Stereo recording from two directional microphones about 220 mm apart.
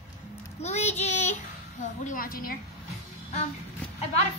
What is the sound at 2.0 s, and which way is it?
Speech, 40° left (ahead or behind).